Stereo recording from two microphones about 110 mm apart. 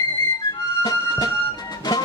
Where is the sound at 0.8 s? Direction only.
35° left (ahead or behind).